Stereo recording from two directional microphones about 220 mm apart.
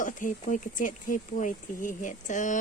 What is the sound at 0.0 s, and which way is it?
Speech, 35° left (ahead or behind).